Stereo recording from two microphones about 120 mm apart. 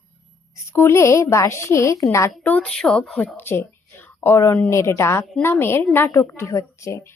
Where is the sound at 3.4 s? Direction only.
20° left (ahead or behind).